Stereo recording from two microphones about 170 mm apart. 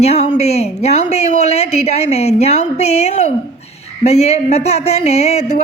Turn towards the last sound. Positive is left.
turn(degrees=40)  # may be behind; listen again after turning